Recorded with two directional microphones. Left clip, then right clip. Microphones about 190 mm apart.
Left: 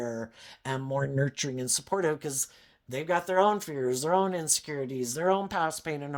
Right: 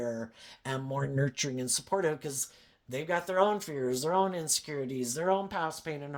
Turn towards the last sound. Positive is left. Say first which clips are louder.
# left 4 dB
turn(degrees=35)  # may be behind; listen again after turning